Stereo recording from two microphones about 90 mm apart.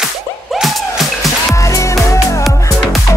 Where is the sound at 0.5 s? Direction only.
Centre (ahead or behind).